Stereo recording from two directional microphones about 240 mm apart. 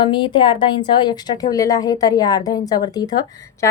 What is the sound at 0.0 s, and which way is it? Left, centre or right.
A woman's voice, centre.